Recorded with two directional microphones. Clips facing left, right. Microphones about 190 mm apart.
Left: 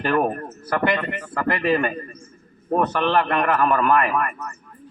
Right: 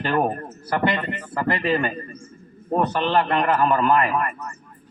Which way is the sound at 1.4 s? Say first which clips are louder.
Left 1 dB; 30° right (ahead or behind).